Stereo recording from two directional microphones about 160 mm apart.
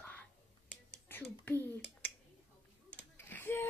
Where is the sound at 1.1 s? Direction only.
10° left (ahead or behind).